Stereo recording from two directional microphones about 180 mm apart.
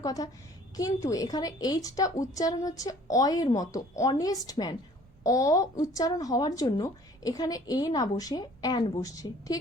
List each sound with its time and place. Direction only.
0.0 s speech: 20° left (ahead or behind)